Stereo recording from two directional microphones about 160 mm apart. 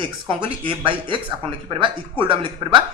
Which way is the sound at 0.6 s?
35° right (ahead or behind).